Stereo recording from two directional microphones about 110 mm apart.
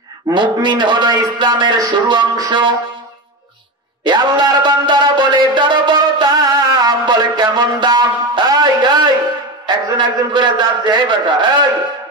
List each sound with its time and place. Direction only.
0.3 s a man's voice: 45° right (ahead or behind)
4.0 s a sound: 40° right (ahead or behind)
9.7 s a man's voice: 45° right (ahead or behind)